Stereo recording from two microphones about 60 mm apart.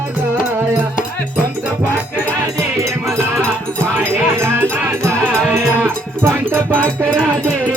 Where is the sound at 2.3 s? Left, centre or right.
Right.